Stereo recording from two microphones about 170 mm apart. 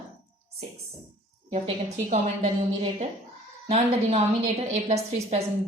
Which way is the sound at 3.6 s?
40° right (ahead or behind).